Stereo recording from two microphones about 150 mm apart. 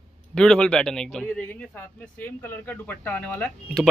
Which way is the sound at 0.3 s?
5° left (ahead or behind).